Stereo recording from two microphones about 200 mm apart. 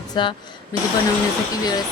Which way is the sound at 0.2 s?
20° left (ahead or behind).